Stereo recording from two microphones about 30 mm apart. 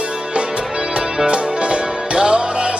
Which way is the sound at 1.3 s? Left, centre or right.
Right.